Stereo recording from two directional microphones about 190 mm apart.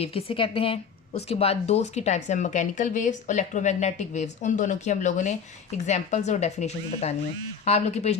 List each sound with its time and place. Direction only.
0.0 s a woman's voice: 30° left (ahead or behind)